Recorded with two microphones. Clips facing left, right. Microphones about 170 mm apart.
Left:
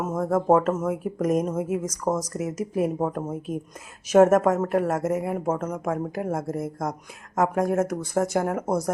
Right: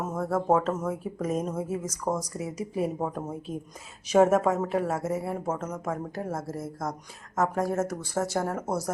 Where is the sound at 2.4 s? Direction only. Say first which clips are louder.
Left 5 dB; 85° left.